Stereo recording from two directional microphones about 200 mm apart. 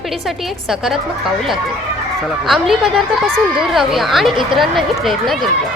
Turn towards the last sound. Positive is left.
turn(degrees=0)  # may be behind; listen again after turning